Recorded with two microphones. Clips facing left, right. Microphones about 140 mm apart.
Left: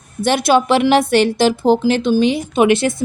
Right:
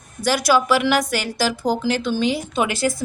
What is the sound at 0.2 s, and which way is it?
A woman's voice, 25° left (ahead or behind).